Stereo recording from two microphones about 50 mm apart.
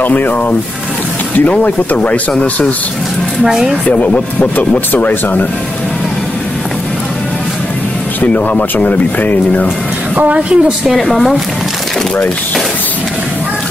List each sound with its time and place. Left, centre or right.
0.0 s speech: left
1.5 s speech: left
3.4 s speech: centre
3.8 s speech: left
8.2 s speech: left
10.1 s a woman's voice: right
11.1 s speech: centre